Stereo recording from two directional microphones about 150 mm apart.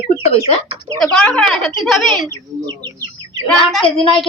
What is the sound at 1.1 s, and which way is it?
Speech, 5° left (ahead or behind).